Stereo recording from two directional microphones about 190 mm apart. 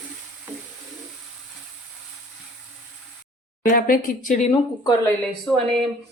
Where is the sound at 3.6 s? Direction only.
45° left (ahead or behind).